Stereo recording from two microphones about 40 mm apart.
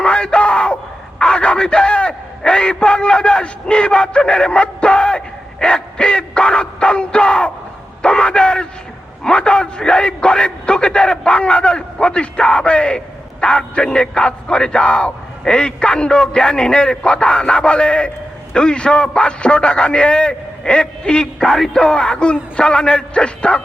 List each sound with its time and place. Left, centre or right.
0.0 s crowd: left
1.2 s a man's voice: left